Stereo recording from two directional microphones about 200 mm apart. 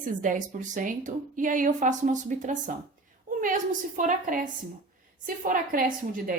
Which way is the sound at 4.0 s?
40° right (ahead or behind).